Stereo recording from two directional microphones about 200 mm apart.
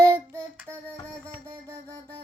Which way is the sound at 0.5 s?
10° right (ahead or behind).